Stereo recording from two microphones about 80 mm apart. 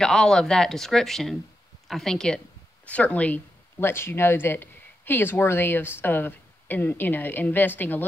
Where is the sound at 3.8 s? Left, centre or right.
Left.